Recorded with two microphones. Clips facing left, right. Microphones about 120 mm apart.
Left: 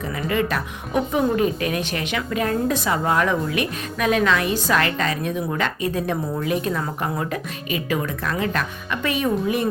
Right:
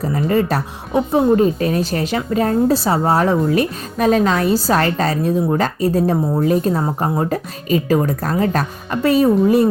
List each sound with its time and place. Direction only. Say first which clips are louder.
0.0 s a woman's voice: right 6 dB; 35° right (ahead or behind)